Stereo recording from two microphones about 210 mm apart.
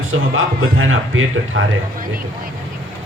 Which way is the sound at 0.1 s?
75° right (ahead or behind).